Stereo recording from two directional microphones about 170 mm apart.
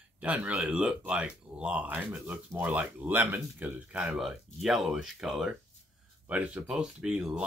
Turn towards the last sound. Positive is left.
turn(degrees=-5)  # may be behind; listen again after turning